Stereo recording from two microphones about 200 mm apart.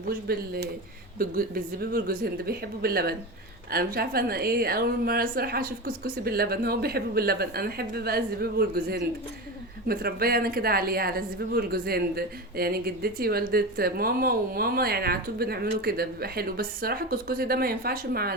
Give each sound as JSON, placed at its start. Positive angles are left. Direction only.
{"t": 0.1, "sound": "a woman's voice", "side_deg": -50}